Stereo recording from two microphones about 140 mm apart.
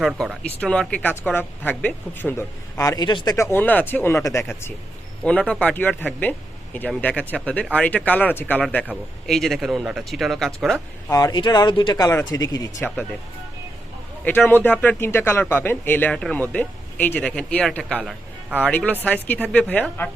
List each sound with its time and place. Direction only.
0.0 s a man's voice: centre (ahead or behind); by 3.3 s 30° left (ahead or behind)
3.3 s a man's voice: 20° left (ahead or behind)
5.2 s a man's voice: 10° left (ahead or behind)
11.1 s speech: 25° left (ahead or behind)
14.3 s a man's voice: 15° left (ahead or behind)